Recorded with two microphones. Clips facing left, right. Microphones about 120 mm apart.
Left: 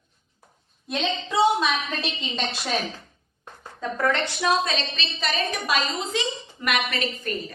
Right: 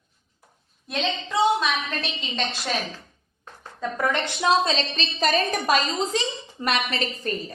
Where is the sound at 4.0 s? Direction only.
15° right (ahead or behind); by 7.3 s 30° right (ahead or behind).